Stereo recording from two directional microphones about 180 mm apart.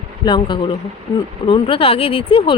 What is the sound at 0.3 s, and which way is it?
Speech, 25° left (ahead or behind).